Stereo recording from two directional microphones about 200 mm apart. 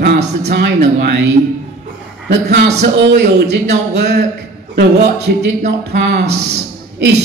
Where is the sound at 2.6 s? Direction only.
55° right (ahead or behind).